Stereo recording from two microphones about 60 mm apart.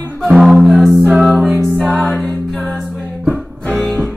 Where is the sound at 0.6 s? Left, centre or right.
Centre.